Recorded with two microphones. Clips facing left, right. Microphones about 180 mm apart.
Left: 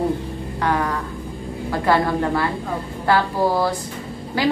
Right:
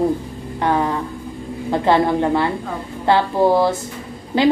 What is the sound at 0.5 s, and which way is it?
A woman's voice, 25° right (ahead or behind).